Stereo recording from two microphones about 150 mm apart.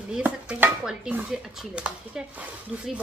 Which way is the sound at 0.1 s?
10° right (ahead or behind).